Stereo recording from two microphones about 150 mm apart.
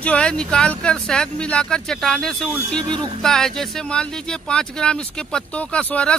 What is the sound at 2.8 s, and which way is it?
Speech, 30° right (ahead or behind).